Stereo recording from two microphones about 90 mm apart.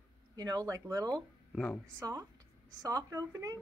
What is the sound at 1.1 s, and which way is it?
Speech, 10° left (ahead or behind).